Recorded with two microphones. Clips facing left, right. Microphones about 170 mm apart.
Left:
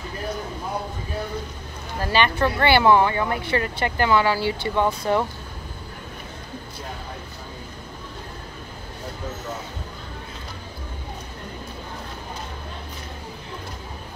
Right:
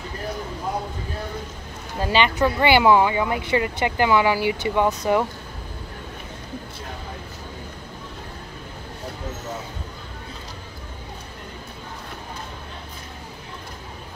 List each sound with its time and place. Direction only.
2.0 s speech: 15° right (ahead or behind)